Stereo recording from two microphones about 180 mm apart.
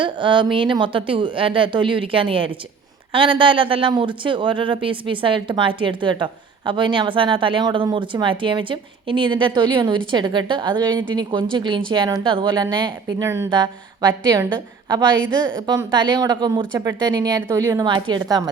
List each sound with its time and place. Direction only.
0.0 s a woman's voice: 25° right (ahead or behind)